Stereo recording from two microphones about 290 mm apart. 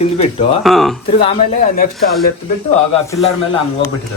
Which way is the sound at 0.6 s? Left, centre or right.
Centre.